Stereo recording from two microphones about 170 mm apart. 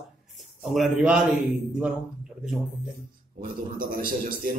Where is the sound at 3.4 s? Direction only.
55° right (ahead or behind).